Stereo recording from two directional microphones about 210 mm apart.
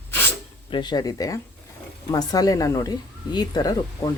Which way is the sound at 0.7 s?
20° left (ahead or behind).